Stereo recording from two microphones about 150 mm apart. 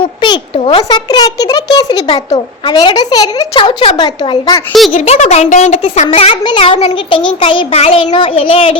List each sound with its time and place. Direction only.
0.0 s a child's voice: 35° left (ahead or behind)
2.0 s a child's voice: 35° left (ahead or behind)
4.9 s a child's voice: 45° left (ahead or behind)